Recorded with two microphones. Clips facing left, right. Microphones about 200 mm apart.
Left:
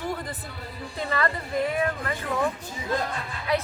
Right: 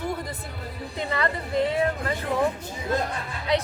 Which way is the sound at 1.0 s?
20° right (ahead or behind).